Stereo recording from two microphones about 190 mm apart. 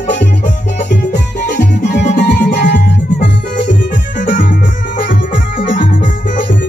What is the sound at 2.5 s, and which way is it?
Music, 65° left (ahead or behind).